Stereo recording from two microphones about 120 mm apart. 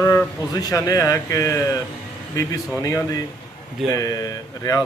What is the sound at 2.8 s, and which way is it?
Speech, 30° left (ahead or behind).